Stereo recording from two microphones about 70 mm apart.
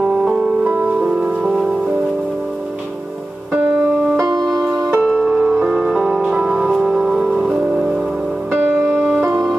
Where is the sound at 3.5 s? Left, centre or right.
Right.